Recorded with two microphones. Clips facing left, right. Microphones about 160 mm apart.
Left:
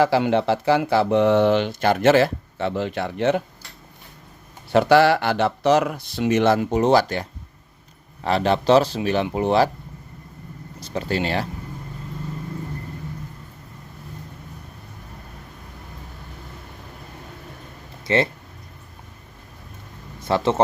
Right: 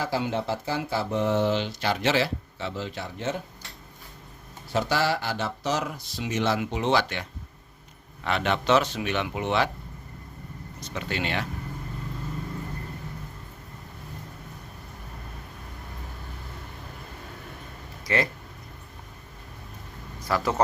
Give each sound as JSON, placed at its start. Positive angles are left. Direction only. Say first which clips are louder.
{"t": 0.0, "sound": "speech", "louder": "left 9 dB", "side_deg": 75}
{"t": 4.7, "sound": "speech", "louder": "left 10 dB", "side_deg": 65}
{"t": 6.6, "sound": "speech", "louder": "left 7 dB", "side_deg": 40}
{"t": 10.8, "sound": "speech", "louder": "left 7 dB", "side_deg": 35}
{"t": 18.1, "sound": "speech", "louder": "left 6 dB", "side_deg": 25}
{"t": 20.2, "sound": "speech", "louder": "left 6 dB", "side_deg": 25}